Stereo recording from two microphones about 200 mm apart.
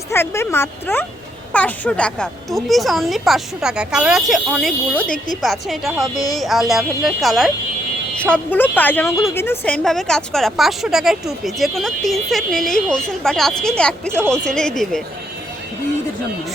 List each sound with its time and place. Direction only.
0.1 s a woman's voice: 10° left (ahead or behind)